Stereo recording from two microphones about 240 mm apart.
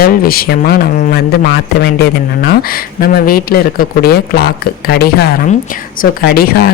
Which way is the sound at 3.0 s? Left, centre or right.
Left.